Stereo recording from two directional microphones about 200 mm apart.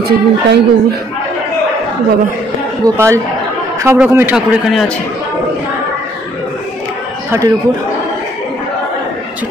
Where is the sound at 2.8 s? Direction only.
15° right (ahead or behind).